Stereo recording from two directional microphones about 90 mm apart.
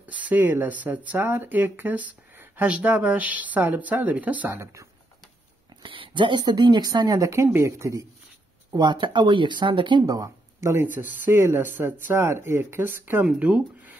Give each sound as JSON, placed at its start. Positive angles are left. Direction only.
{"t": 0.0, "sound": "speech", "side_deg": -20}
{"t": 5.8, "sound": "speech", "side_deg": -65}
{"t": 8.7, "sound": "speech", "side_deg": -55}
{"t": 10.0, "sound": "speech", "side_deg": -40}